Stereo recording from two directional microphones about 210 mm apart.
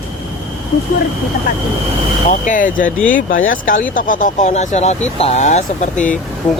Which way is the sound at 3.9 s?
40° left (ahead or behind).